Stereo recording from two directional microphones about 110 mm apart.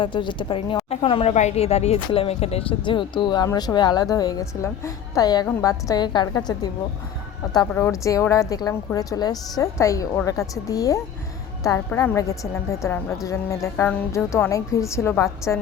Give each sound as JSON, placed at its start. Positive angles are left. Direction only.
{"t": 0.0, "sound": "speech", "side_deg": 45}
{"t": 0.9, "sound": "speech", "side_deg": 65}
{"t": 2.0, "sound": "a woman's voice", "side_deg": 60}
{"t": 7.8, "sound": "a woman's voice", "side_deg": 25}